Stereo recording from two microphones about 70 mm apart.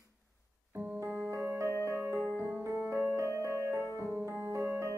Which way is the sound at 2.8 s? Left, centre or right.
Right.